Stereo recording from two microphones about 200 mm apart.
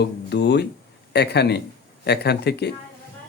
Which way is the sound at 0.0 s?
55° left (ahead or behind).